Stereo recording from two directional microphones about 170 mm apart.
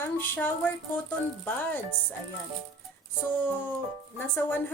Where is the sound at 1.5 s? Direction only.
10° left (ahead or behind).